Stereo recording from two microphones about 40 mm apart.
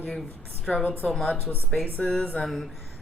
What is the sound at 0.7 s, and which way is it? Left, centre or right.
Speech, left.